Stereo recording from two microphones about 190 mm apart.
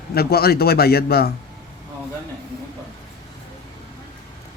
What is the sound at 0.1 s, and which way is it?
A man's voice, 55° left (ahead or behind).